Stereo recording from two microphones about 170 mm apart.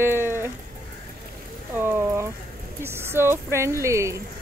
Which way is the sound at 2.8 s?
15° right (ahead or behind).